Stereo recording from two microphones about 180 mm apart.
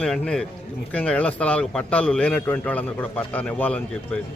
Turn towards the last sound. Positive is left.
turn(degrees=5)  # may be behind; listen again after turning